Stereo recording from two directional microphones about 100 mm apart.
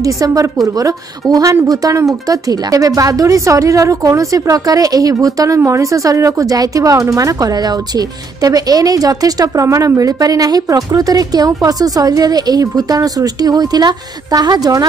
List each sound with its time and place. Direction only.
0.0 s speech: 35° right (ahead or behind)